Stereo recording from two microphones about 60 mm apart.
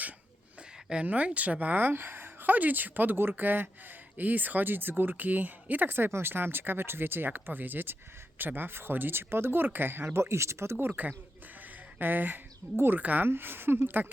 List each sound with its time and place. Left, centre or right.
1.0 s a woman's voice: right
10.8 s speech: right
13.0 s a woman's voice: right
13.2 s speech: right